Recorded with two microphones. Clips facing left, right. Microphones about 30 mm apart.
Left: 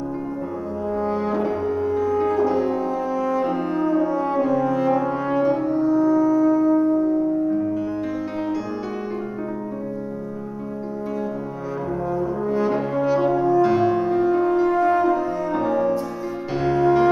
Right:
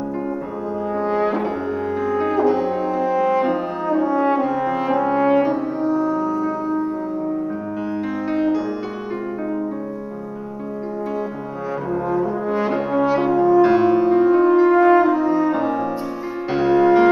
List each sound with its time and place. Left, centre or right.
0.9 s brass instrument: right
11.9 s french horn: right
16.5 s music: centre